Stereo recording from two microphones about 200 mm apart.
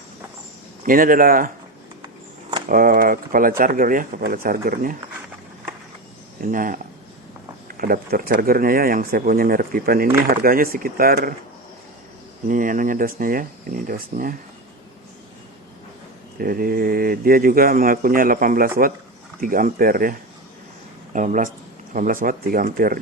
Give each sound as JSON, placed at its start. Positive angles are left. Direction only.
{"t": 0.9, "sound": "speech", "side_deg": -45}
{"t": 2.6, "sound": "speech", "side_deg": -45}
{"t": 6.4, "sound": "speech", "side_deg": -45}
{"t": 7.8, "sound": "speech", "side_deg": -45}
{"t": 12.5, "sound": "speech", "side_deg": -40}
{"t": 16.4, "sound": "speech", "side_deg": -45}